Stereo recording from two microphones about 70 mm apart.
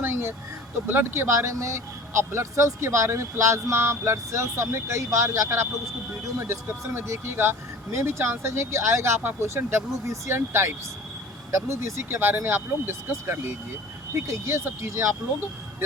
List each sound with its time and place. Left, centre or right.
0.0 s vehicle: right
0.9 s speech: right
11.7 s speech: right